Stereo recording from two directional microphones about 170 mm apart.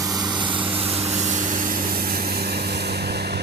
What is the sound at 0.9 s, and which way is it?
Vehicle, 40° right (ahead or behind).